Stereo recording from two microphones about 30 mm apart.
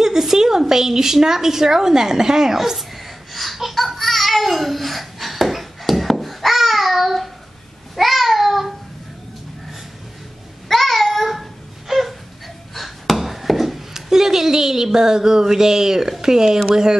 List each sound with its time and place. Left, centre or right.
0.0 s a woman's voice: centre
3.3 s babbling: centre
10.7 s babbling: centre
11.9 s wail: centre
12.7 s chop: centre
13.9 s speech: centre